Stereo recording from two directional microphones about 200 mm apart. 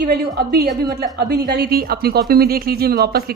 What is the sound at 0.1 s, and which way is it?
A woman's voice, 50° right (ahead or behind).